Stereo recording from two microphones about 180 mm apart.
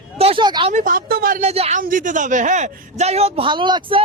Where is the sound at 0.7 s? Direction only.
45° right (ahead or behind).